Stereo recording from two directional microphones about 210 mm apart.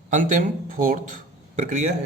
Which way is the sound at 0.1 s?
40° right (ahead or behind).